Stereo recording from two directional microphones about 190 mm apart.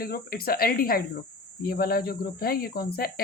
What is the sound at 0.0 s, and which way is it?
Speech, 50° left (ahead or behind).